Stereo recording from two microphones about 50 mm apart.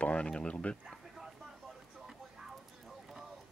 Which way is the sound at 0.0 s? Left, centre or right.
Left.